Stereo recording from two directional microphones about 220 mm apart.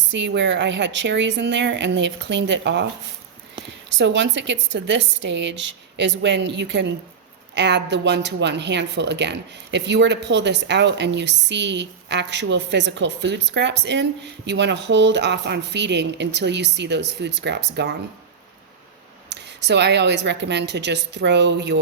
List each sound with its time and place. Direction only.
0.1 s a woman's voice: 55° right (ahead or behind)
3.9 s a woman's voice: 55° right (ahead or behind)
19.3 s a woman's voice: 50° right (ahead or behind)